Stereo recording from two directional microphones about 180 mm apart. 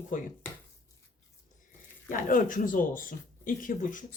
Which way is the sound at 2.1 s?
50° left (ahead or behind).